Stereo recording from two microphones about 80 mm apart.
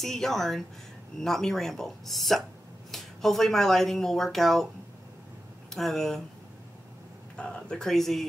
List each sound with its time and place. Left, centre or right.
0.0 s speech: centre
5.7 s speech: centre
7.3 s speech: centre